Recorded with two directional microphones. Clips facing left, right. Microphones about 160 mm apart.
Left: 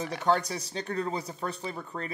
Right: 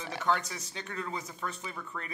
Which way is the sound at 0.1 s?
35° left (ahead or behind).